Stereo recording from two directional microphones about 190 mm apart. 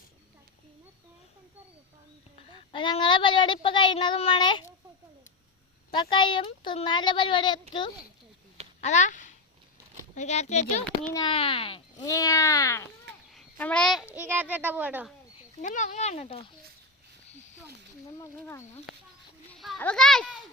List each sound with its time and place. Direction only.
2.5 s speech: 25° left (ahead or behind)
5.9 s speech: 25° left (ahead or behind)
8.8 s speech: 40° left (ahead or behind)
11.1 s speech: 25° left (ahead or behind)
12.0 s a child's voice: 15° left (ahead or behind); by 15.1 s 10° right (ahead or behind)
15.6 s speech: 40° left (ahead or behind)
18.2 s speech: 15° left (ahead or behind)
19.5 s a child's voice: centre (ahead or behind)